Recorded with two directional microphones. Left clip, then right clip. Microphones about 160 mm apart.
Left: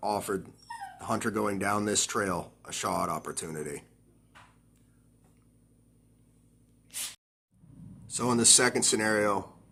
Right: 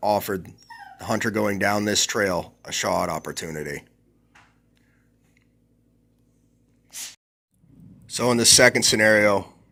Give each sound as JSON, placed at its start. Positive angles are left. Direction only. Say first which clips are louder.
{"t": 0.0, "sound": "speech", "louder": "right 8 dB", "side_deg": -30}
{"t": 8.0, "sound": "speech", "louder": "right 7 dB", "side_deg": -35}